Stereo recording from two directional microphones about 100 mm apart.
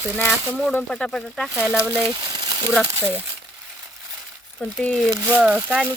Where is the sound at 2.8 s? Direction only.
25° right (ahead or behind).